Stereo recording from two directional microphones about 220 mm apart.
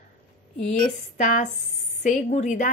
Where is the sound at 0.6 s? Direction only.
35° left (ahead or behind).